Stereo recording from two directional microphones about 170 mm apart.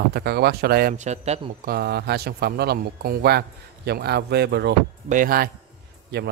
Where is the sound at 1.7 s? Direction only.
70° right (ahead or behind).